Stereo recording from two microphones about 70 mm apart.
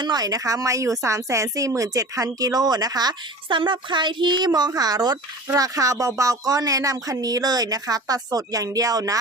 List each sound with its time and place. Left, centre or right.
0.0 s speech: right
4.0 s speech: right
4.7 s speech: right
5.5 s speech: right